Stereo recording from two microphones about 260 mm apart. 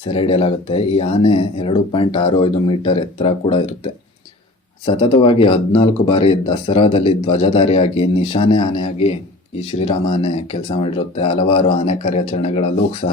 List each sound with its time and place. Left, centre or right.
0.1 s speech: left
4.9 s speech: centre